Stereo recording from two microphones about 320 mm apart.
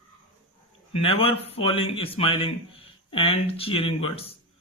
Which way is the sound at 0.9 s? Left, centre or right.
Centre.